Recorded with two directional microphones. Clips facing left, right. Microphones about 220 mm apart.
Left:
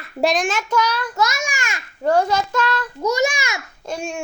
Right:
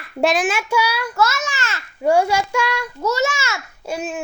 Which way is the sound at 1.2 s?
15° left (ahead or behind).